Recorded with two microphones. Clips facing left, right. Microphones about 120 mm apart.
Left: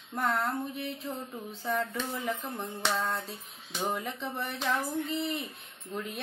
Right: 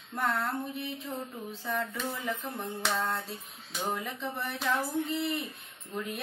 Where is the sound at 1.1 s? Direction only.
30° left (ahead or behind).